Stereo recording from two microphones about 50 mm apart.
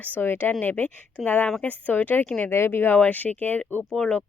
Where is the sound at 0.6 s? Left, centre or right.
Left.